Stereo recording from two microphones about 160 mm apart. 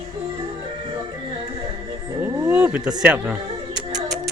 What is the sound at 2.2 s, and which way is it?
Music, 10° right (ahead or behind).